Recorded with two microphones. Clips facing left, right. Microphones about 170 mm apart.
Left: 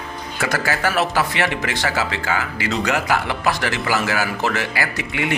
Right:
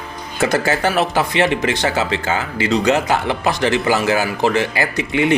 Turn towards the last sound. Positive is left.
turn(degrees=-25)  # may be behind; listen again after turning